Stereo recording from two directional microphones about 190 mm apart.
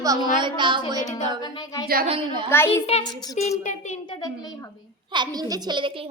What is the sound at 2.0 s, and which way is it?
Speech, 30° right (ahead or behind).